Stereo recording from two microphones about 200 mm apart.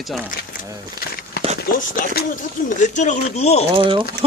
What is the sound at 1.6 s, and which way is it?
Speech, 45° left (ahead or behind).